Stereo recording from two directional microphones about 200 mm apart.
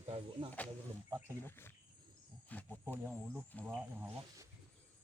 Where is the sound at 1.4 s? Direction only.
10° left (ahead or behind).